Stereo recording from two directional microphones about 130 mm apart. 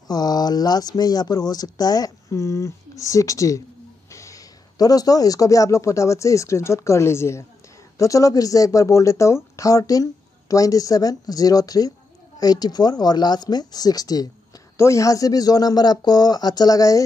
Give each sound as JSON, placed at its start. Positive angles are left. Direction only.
{"t": 0.1, "sound": "a man's voice", "side_deg": 30}